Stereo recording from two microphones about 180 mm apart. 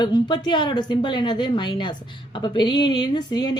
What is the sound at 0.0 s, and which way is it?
Speech, 25° left (ahead or behind).